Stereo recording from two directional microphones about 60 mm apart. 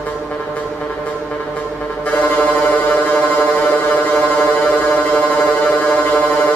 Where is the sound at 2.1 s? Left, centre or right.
Left.